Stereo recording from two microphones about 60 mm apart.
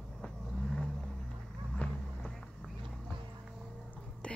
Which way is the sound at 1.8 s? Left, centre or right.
Left.